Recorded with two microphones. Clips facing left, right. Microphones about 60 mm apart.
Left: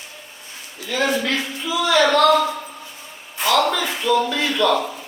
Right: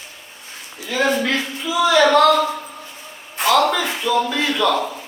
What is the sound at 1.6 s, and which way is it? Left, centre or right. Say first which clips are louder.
Speech: right 3 dB; centre.